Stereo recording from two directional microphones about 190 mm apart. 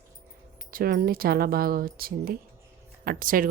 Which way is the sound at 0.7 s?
50° right (ahead or behind).